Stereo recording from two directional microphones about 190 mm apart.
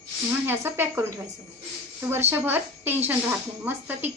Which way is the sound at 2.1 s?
10° right (ahead or behind).